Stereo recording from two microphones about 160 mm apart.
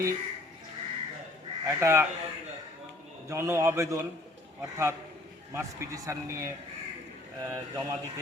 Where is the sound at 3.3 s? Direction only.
15° right (ahead or behind).